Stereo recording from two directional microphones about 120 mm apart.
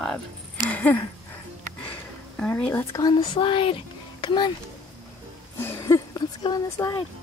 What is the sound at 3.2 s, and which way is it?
Speech, 45° left (ahead or behind).